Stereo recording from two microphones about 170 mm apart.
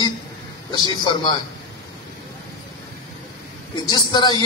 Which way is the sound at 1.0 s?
25° left (ahead or behind).